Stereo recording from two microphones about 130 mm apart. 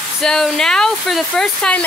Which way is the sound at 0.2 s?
5° left (ahead or behind).